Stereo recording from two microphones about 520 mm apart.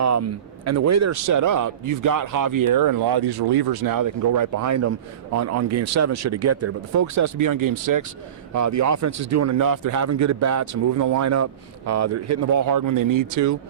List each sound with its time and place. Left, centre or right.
0.0 s a man's voice: right